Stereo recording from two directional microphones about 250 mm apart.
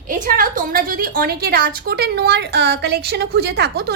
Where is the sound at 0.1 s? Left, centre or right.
Right.